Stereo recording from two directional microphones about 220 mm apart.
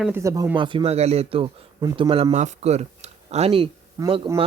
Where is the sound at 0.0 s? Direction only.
10° right (ahead or behind).